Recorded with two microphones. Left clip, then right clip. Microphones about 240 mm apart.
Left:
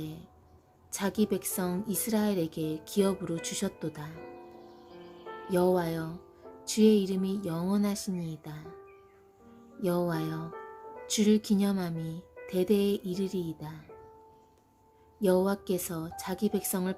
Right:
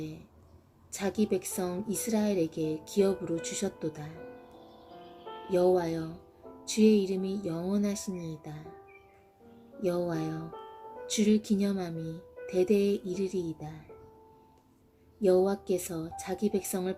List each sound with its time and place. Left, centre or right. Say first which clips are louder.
0.9 s speech: even; left
5.5 s speech: right 1 dB; left
9.8 s speech: even; left
15.2 s speech: right 2 dB; left